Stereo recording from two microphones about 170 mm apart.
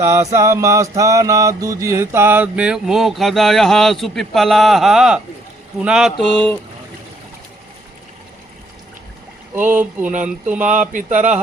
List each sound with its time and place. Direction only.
0.0 s speech: 15° right (ahead or behind)
0.3 s mantra: 15° right (ahead or behind)
6.3 s speech: 10° left (ahead or behind)
9.6 s speech: 10° right (ahead or behind)
10.9 s mantra: 45° right (ahead or behind)